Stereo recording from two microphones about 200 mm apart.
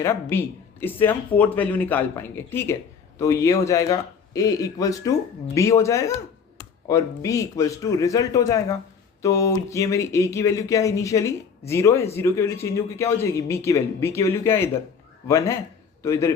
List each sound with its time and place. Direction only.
0.0 s speech: 15° left (ahead or behind)